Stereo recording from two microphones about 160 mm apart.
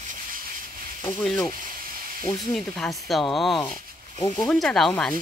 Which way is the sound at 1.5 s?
60° right (ahead or behind).